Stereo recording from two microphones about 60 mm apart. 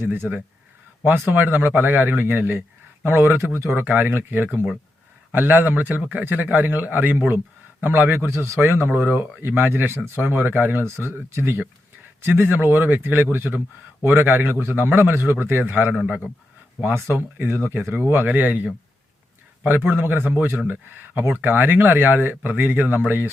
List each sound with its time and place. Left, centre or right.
0.0 s speech: right
10.8 s a man's voice: right
14.9 s speech: right
16.8 s speech: right